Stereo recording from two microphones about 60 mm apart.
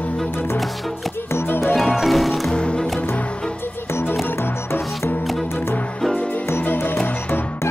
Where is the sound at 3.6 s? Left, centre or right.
Left.